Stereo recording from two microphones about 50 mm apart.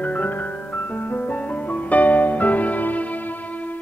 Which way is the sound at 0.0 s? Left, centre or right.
Left.